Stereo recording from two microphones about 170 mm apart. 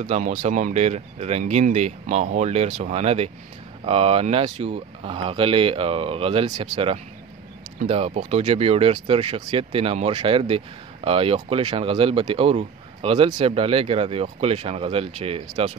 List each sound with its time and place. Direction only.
0.0 s speech: 45° right (ahead or behind)